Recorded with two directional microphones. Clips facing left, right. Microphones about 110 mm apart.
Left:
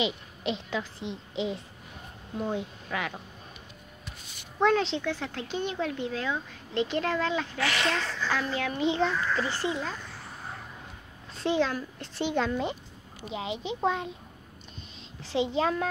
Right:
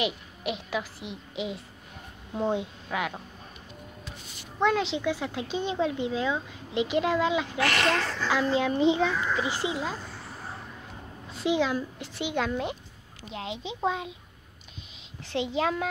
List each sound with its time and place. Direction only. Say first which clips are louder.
0.4 s speech: even; 10° right (ahead or behind)
2.3 s a child's voice: right 4 dB; 25° right (ahead or behind)
2.9 s speech: right 2 dB; 5° right (ahead or behind)
4.6 s speech: left 1 dB; centre (ahead or behind)
7.6 s speech: right 3 dB; 55° right (ahead or behind)
8.3 s a child's voice: right 6 dB; 20° right (ahead or behind)
8.9 s speech: right 1 dB; 10° right (ahead or behind)
11.3 s a woman's voice: right 1 dB; 5° right (ahead or behind)
15.4 s a child's voice: even; 5° right (ahead or behind)